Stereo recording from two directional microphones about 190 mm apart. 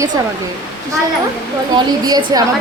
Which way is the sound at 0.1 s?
20° right (ahead or behind).